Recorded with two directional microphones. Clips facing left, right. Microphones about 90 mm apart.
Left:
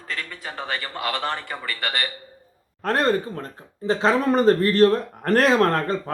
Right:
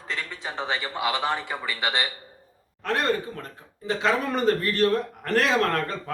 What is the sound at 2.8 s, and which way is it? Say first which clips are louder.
A man's voice: left 4 dB; 35° left (ahead or behind).